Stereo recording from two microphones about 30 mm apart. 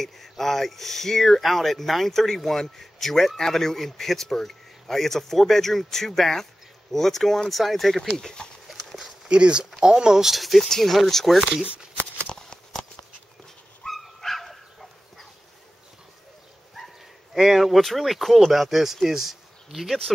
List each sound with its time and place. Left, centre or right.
0.0 s speech: centre
8.6 s horse: centre
9.3 s speech: right
10.2 s speech: centre
12.4 s a sound: left
13.8 s dog: centre
16.7 s dog: centre
17.4 s speech: centre